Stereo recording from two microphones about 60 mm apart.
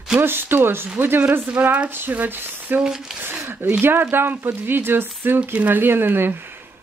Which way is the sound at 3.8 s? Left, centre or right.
Right.